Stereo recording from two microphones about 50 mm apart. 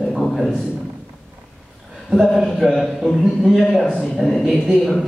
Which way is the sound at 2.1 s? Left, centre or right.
Centre.